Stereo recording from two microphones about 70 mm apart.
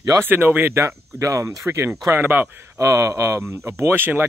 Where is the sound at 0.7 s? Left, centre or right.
Right.